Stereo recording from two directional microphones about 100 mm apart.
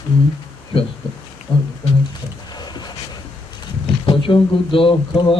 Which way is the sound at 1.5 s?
60° left (ahead or behind).